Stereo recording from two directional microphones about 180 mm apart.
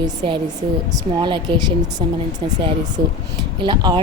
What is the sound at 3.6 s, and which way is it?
Speech, 25° right (ahead or behind).